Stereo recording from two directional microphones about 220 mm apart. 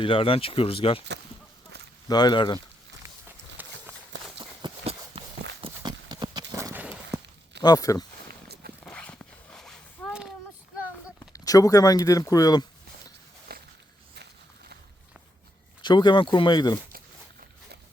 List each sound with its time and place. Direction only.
0.0 s speech: 25° left (ahead or behind)
2.0 s speech: 20° left (ahead or behind)
3.0 s run: 10° right (ahead or behind)
4.4 s clip-clop: 25° right (ahead or behind)
5.6 s horse: 20° right (ahead or behind)
7.6 s speech: 15° left (ahead or behind)
8.3 s walk: 45° right (ahead or behind)
8.8 s a sound: 5° left (ahead or behind)
11.2 s speech: 15° left (ahead or behind)
13.5 s walk: 45° right (ahead or behind)
15.8 s speech: 20° left (ahead or behind)